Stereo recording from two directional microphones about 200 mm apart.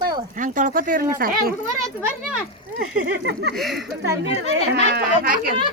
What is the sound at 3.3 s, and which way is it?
Speech, 55° right (ahead or behind).